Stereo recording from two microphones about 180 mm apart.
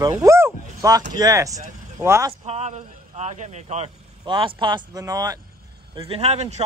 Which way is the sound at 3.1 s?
40° right (ahead or behind).